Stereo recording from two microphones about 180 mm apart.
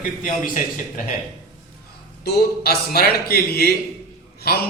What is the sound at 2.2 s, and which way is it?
A man's voice, 65° left (ahead or behind).